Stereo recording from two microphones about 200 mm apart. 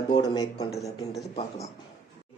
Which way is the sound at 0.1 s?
20° left (ahead or behind).